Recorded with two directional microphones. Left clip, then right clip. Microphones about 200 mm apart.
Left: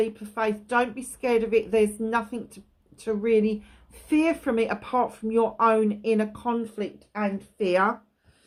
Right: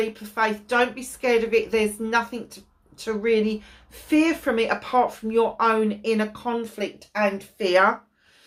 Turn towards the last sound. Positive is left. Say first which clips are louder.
# right 4 dB
turn(degrees=45)  # may be behind; listen again after turning